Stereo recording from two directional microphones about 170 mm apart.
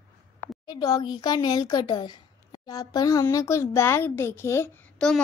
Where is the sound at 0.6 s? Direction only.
20° left (ahead or behind).